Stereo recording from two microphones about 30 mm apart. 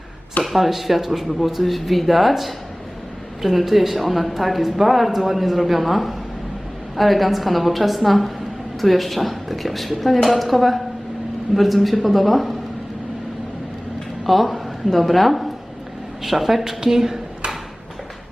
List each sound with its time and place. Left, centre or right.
0.4 s a woman's voice: centre
14.3 s a woman's voice: centre
16.2 s a woman's voice: centre